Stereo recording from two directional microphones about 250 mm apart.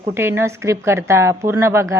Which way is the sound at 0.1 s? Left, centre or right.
Centre.